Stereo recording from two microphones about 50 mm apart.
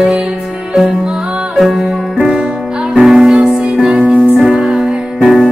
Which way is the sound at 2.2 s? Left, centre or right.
Centre.